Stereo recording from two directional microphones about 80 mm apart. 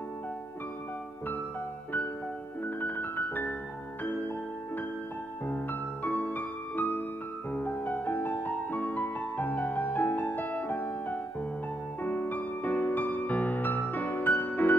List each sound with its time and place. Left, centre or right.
2.6 s piano: left
5.5 s music: left